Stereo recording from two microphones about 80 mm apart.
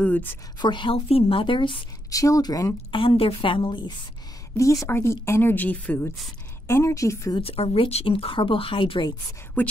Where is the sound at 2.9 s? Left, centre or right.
Left.